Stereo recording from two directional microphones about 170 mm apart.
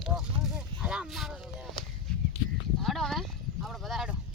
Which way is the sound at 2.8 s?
Centre (ahead or behind).